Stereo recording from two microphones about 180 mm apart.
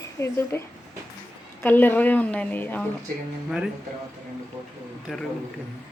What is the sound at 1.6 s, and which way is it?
A woman's voice, 10° left (ahead or behind).